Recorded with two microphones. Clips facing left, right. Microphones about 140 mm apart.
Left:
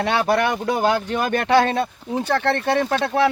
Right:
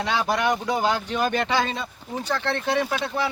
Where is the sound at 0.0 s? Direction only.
60° left (ahead or behind).